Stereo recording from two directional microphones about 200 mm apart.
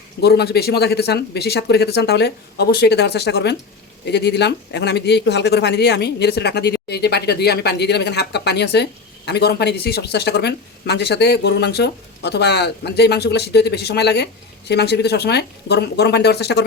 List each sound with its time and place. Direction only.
0.2 s speech: 55° left (ahead or behind)